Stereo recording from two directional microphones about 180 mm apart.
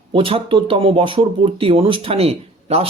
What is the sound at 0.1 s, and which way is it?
Speech, 30° right (ahead or behind).